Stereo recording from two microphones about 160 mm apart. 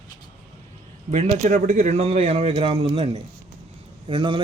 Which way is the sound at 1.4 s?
55° right (ahead or behind).